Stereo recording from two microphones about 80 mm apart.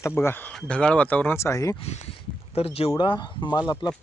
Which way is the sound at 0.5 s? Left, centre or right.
Centre.